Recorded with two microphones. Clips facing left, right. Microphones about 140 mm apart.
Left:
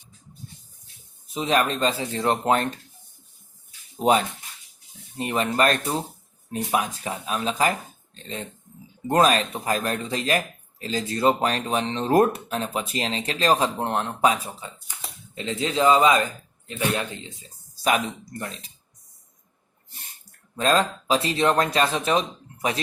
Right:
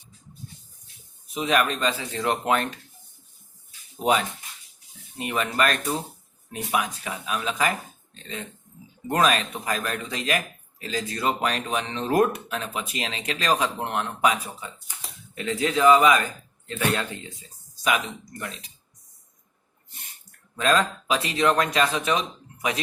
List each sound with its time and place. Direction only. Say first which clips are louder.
1.3 s speech: left 1 dB; 30° left (ahead or behind)
5.1 s speech: left 2 dB; 35° left (ahead or behind)
17.8 s speech: left 2 dB; 35° left (ahead or behind)
20.6 s speech: left 1 dB; 30° left (ahead or behind)